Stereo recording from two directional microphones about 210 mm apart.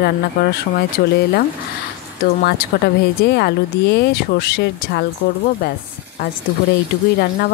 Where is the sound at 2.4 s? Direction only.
50° left (ahead or behind).